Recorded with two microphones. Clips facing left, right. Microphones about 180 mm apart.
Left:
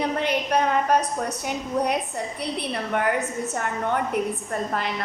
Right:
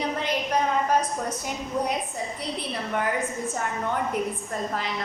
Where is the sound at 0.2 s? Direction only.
65° left (ahead or behind).